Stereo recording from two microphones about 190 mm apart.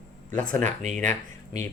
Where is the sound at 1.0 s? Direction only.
40° right (ahead or behind).